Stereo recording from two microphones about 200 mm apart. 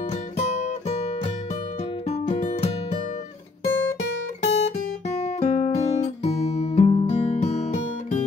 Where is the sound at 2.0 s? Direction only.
30° left (ahead or behind).